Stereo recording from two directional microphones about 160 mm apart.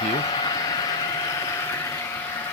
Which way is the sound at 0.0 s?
30° left (ahead or behind).